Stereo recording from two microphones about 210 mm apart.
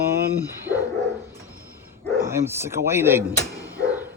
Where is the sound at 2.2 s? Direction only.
15° right (ahead or behind).